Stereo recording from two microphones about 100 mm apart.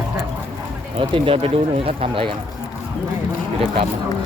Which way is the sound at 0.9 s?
65° right (ahead or behind).